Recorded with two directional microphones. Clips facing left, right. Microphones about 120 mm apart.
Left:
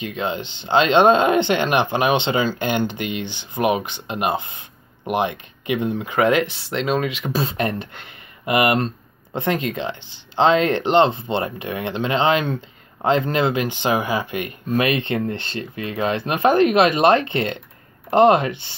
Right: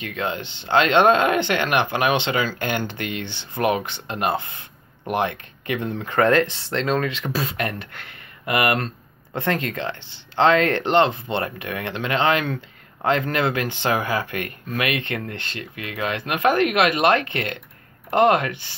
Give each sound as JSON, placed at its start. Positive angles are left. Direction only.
{"t": 0.0, "sound": "speech", "side_deg": 20}
{"t": 7.3, "sound": "speech", "side_deg": 25}